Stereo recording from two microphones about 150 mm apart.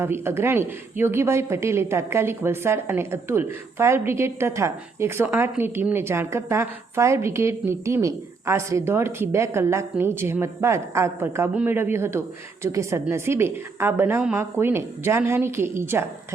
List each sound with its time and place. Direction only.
0.0 s a woman's voice: 15° right (ahead or behind)